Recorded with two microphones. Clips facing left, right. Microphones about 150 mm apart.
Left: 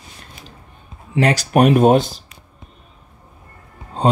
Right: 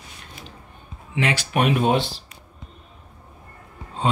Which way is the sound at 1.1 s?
40° left (ahead or behind).